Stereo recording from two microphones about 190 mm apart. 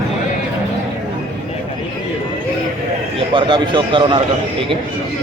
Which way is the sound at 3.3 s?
25° right (ahead or behind).